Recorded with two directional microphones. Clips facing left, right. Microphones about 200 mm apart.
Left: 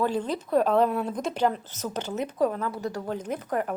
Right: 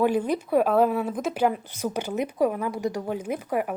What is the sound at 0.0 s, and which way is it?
Speech, 10° right (ahead or behind).